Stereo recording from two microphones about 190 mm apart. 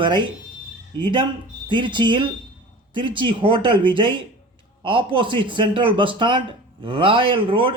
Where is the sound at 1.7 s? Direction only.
25° right (ahead or behind).